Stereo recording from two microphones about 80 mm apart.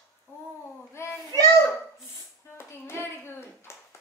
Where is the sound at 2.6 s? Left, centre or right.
Left.